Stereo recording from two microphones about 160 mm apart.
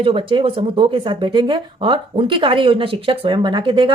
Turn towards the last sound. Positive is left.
turn(degrees=-30)  # may be behind; listen again after turning